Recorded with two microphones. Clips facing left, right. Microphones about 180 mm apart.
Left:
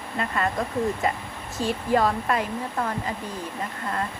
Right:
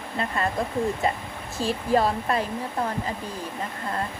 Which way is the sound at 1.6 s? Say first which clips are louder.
Even; 35° right (ahead or behind).